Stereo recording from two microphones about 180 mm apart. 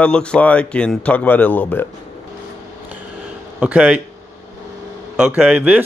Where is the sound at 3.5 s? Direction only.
5° right (ahead or behind).